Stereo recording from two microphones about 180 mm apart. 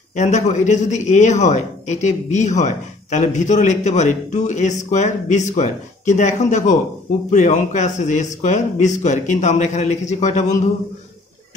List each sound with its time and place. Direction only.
0.1 s a man's voice: 40° left (ahead or behind)